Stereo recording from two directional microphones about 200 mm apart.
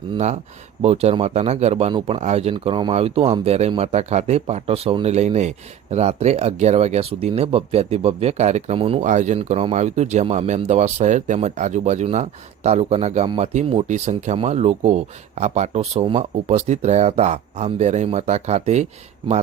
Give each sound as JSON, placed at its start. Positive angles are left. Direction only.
{"t": 0.8, "sound": "speech", "side_deg": -30}